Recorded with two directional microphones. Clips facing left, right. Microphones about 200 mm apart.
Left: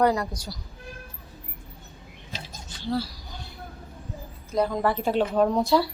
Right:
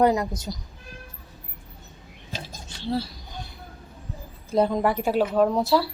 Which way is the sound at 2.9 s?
25° right (ahead or behind).